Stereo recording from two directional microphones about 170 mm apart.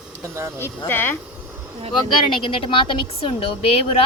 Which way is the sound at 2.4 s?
30° left (ahead or behind).